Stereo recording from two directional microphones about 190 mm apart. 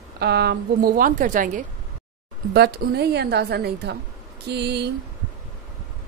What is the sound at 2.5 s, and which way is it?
A woman's voice, 55° right (ahead or behind).